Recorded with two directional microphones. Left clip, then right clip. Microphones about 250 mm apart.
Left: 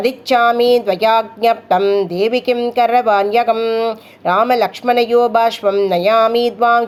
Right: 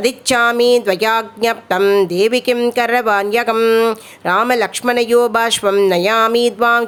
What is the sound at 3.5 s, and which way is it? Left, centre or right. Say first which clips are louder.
Speech: right 4 dB; right.